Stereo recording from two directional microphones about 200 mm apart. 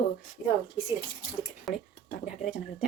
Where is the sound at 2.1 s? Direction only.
45° left (ahead or behind).